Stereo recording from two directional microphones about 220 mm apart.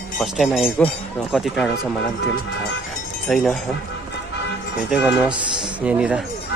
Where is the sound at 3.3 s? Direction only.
Centre (ahead or behind).